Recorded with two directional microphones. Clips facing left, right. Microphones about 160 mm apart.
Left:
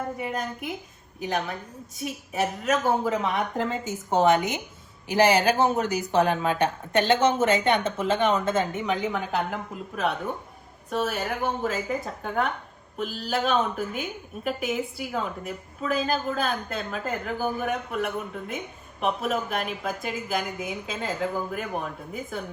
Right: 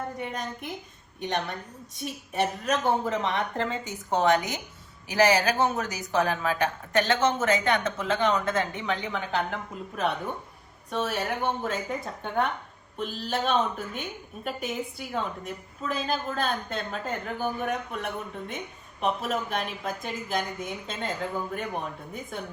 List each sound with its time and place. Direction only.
0.2 s a woman's voice: 5° left (ahead or behind)
4.2 s speech: 25° left (ahead or behind)
8.8 s a woman's voice: 5° left (ahead or behind)